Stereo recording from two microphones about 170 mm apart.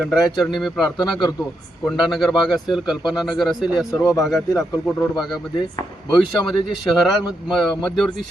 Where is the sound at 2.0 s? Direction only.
Centre (ahead or behind).